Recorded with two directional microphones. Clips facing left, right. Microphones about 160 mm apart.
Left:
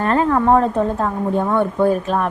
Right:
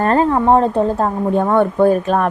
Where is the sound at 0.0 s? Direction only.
40° right (ahead or behind).